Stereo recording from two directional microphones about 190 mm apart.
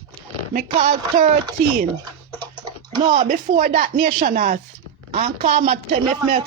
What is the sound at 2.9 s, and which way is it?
Speech, 25° right (ahead or behind).